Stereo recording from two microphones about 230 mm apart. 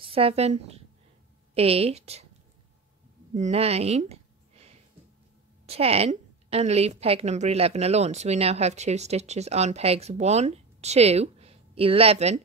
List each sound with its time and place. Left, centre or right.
0.1 s a woman's voice: right
3.3 s a sound: right
5.7 s a woman's voice: right